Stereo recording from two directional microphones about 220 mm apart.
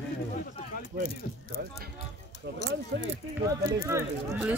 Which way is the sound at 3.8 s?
10° right (ahead or behind).